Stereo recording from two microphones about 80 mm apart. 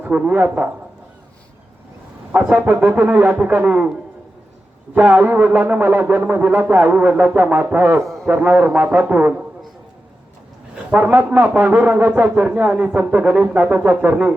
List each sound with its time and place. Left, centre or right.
0.0 s speech: centre
2.3 s speech: centre
4.9 s speech: right
7.9 s speech: centre
8.3 s speech: centre
10.9 s speech: right